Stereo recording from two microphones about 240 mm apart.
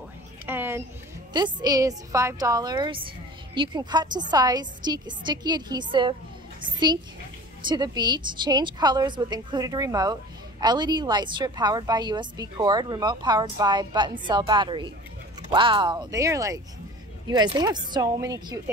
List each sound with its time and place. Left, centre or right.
0.5 s a sound: centre
1.3 s a woman's voice: centre
7.6 s a woman's voice: centre